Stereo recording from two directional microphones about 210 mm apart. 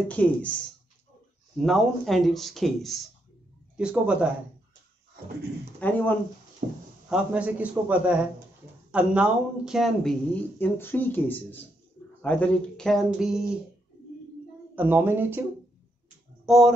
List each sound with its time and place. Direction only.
0.1 s speech: 5° left (ahead or behind)
1.6 s speech: centre (ahead or behind)
5.8 s speech: 10° left (ahead or behind)
6.6 s speech: 35° right (ahead or behind)
7.1 s a man's voice: 5° right (ahead or behind)
14.8 s a man's voice: 10° right (ahead or behind)
16.4 s speech: centre (ahead or behind)